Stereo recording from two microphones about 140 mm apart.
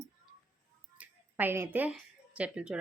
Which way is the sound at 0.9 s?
15° right (ahead or behind).